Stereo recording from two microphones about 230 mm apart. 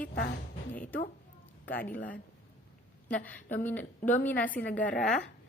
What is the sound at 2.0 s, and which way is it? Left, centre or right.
Speech, left.